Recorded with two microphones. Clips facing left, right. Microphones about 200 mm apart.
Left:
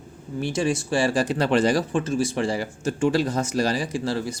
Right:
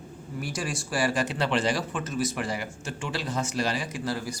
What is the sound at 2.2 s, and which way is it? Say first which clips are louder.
Speech: left 5 dB; 30° left (ahead or behind).